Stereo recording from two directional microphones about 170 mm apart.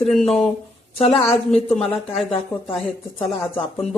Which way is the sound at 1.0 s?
35° left (ahead or behind).